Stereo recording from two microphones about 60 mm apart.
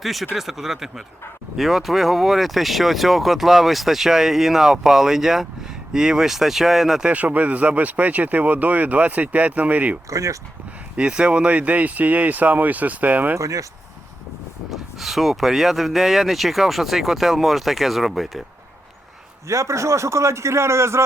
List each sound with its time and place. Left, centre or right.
0.0 s speech: centre
7.1 s speech: right
10.1 s speech: right
10.9 s speech: centre
13.3 s speech: right
14.7 s speech: centre
19.5 s speech: right